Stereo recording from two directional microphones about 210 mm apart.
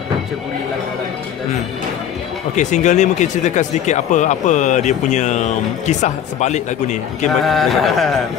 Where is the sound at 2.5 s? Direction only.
35° left (ahead or behind).